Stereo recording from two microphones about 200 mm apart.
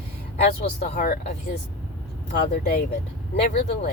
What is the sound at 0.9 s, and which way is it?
Speech, 50° left (ahead or behind).